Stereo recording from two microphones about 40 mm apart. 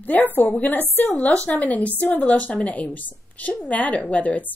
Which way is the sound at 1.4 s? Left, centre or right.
Left.